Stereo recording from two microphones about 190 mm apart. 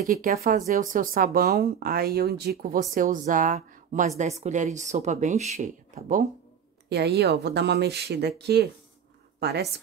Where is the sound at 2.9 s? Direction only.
45° right (ahead or behind).